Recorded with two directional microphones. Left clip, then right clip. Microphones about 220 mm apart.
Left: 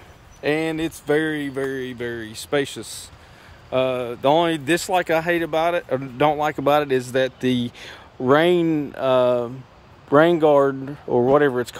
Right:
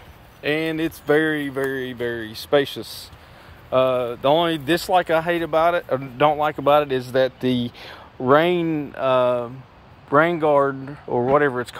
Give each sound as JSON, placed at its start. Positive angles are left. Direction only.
{"t": 0.4, "sound": "speech", "side_deg": 15}